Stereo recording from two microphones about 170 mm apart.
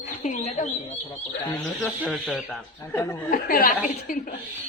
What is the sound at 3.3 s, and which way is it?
Speech, 55° left (ahead or behind).